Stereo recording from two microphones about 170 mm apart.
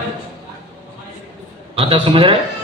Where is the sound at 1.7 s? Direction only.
30° right (ahead or behind).